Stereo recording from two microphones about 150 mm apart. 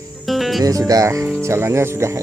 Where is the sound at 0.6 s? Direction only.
25° right (ahead or behind).